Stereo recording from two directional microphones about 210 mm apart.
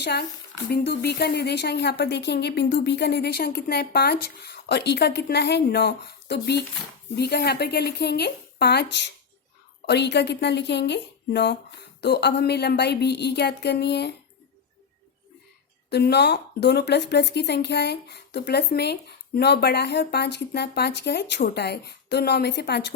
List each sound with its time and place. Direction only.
0.0 s a woman's voice: 50° left (ahead or behind)
15.9 s speech: 50° left (ahead or behind)